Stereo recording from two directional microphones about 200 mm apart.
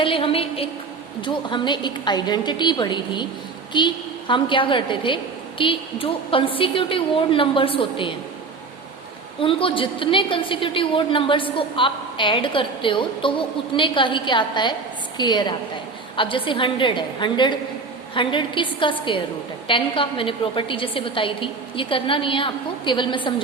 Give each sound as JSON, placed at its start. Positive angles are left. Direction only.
{"t": 0.0, "sound": "a woman's voice", "side_deg": 25}
{"t": 9.4, "sound": "a woman's voice", "side_deg": 25}